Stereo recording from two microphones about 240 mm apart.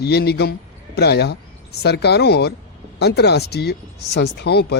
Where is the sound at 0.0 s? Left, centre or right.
Left.